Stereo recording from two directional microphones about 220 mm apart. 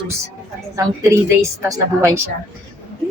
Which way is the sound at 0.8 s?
15° right (ahead or behind).